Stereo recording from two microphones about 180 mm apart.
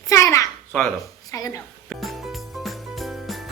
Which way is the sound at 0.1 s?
20° left (ahead or behind).